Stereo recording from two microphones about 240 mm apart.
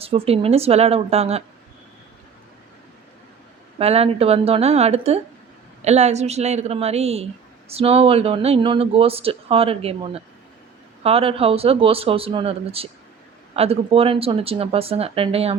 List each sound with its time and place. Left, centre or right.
0.0 s speech: right
3.8 s speech: right